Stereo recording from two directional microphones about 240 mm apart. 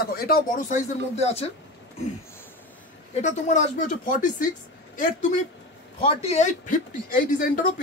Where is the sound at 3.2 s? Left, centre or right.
Left.